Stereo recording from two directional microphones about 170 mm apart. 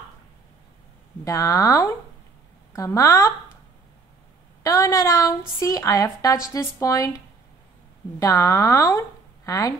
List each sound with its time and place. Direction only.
1.2 s a woman's voice: 20° left (ahead or behind)
4.6 s a woman's voice: 20° left (ahead or behind)
8.2 s a woman's voice: 20° left (ahead or behind)